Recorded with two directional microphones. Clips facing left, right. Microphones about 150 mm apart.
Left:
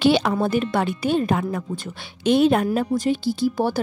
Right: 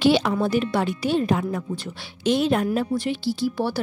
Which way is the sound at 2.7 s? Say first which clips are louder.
Left 3 dB; 40° left (ahead or behind).